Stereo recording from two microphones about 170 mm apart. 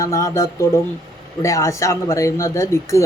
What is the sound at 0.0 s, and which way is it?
Speech, 20° left (ahead or behind).